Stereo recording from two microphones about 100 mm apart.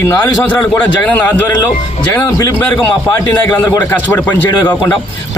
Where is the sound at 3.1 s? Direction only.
20° left (ahead or behind).